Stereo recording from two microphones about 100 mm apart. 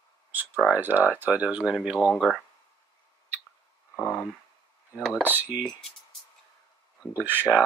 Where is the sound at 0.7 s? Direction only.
20° right (ahead or behind).